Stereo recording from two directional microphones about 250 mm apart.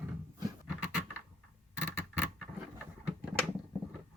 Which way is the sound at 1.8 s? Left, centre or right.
Centre.